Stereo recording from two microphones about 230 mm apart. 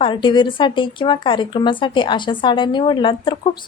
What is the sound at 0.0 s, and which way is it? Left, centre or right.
A woman's voice, left.